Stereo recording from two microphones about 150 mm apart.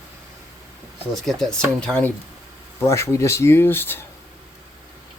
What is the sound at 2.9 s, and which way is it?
Speech, 20° left (ahead or behind).